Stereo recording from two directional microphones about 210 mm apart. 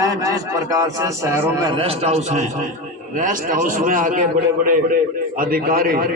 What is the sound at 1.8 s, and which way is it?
A man's voice, 30° right (ahead or behind).